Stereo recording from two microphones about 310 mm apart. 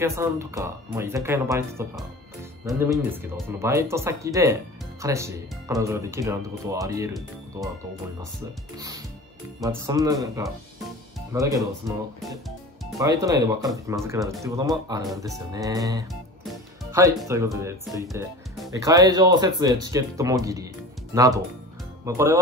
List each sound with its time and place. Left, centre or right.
0.0 s speech: centre
8.7 s speech: centre
11.3 s speech: centre
12.9 s speech: centre